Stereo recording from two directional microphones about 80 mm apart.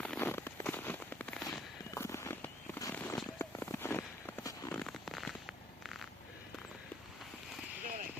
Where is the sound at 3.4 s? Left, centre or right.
Left.